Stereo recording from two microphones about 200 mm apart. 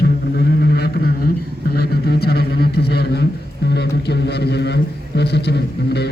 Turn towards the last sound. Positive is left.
turn(degrees=55)  # may be behind; listen again after turning